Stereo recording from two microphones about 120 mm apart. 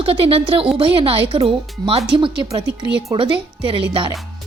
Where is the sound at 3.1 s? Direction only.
45° right (ahead or behind).